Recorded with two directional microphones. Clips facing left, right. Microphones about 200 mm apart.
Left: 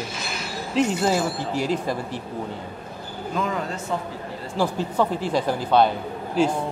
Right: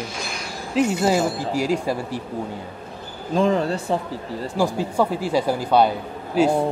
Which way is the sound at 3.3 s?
30° right (ahead or behind).